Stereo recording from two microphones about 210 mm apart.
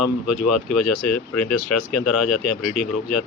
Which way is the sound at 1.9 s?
Centre (ahead or behind).